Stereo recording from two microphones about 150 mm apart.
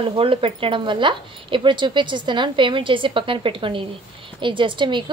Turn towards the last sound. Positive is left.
turn(degrees=-30)  # may be behind; listen again after turning